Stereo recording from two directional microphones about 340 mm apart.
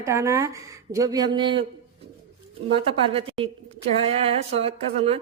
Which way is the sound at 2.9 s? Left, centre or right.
Centre.